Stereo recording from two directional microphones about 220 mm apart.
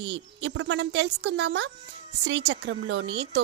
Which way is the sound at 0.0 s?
50° right (ahead or behind).